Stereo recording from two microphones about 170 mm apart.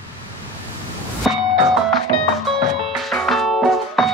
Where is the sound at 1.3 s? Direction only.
5° right (ahead or behind).